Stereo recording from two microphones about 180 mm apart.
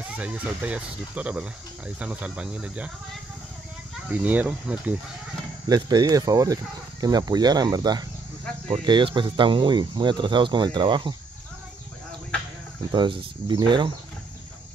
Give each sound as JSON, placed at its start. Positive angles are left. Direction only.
{"t": 0.1, "sound": "speech", "side_deg": -5}
{"t": 4.1, "sound": "speech", "side_deg": -10}
{"t": 5.7, "sound": "speech", "side_deg": -20}
{"t": 12.9, "sound": "speech", "side_deg": -25}